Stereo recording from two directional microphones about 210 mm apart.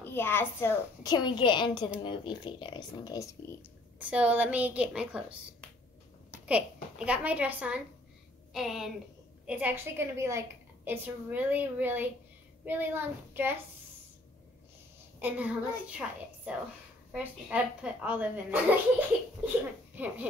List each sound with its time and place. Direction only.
0.0 s a woman's voice: 10° left (ahead or behind)
4.0 s a woman's voice: 5° right (ahead or behind)
7.1 s a woman's voice: 5° right (ahead or behind)
15.1 s a woman's voice: 10° right (ahead or behind)
17.1 s a woman's voice: 5° right (ahead or behind)